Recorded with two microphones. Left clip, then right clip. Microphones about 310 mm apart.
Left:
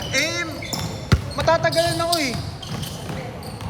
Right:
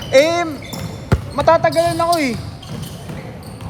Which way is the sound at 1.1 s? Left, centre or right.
Right.